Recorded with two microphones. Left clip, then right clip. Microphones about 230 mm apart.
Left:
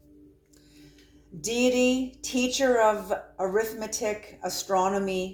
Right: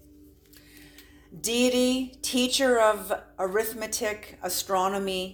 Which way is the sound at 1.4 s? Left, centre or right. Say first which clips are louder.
Even; right.